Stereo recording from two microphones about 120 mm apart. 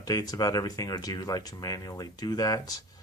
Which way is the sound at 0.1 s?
30° left (ahead or behind).